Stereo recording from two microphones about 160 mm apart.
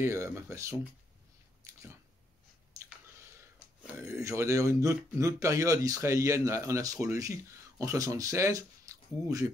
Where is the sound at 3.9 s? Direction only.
20° right (ahead or behind).